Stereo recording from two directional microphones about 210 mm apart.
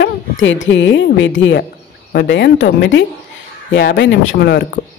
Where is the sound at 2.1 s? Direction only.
55° left (ahead or behind).